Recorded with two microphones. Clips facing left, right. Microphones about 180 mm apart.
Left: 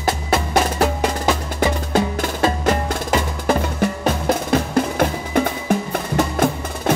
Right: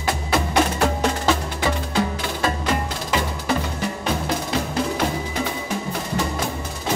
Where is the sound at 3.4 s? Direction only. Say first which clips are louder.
Left 5 dB; 50° left (ahead or behind).